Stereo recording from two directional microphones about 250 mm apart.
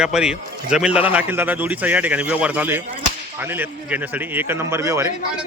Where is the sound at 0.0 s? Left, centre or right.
Centre.